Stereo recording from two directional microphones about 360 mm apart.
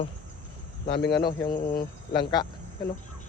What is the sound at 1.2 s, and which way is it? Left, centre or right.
Speech, centre.